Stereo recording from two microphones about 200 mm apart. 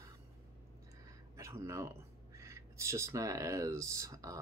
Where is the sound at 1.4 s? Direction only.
15° right (ahead or behind).